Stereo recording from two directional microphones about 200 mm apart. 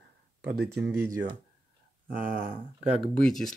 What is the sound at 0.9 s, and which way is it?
Speech, 15° right (ahead or behind).